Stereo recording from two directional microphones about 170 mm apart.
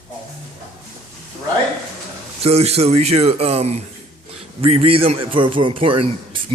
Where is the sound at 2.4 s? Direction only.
35° right (ahead or behind).